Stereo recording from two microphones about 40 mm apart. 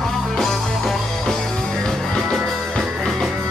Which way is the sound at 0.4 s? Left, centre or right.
Centre.